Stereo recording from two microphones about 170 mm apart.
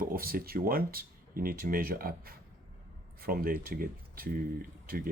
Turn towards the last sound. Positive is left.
turn(degrees=-55)  # may be behind; listen again after turning